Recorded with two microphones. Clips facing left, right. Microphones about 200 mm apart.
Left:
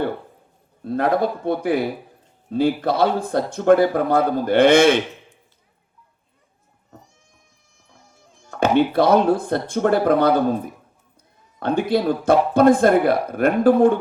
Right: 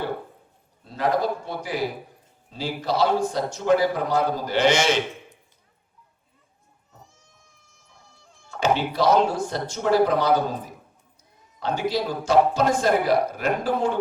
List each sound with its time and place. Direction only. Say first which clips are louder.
0.9 s speech: left 4 dB; 55° left (ahead or behind)
8.4 s speech: left 6 dB; 55° left (ahead or behind)